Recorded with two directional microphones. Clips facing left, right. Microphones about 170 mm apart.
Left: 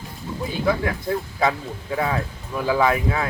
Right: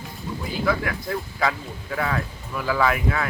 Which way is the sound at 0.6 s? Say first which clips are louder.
Left 2 dB; 25° left (ahead or behind).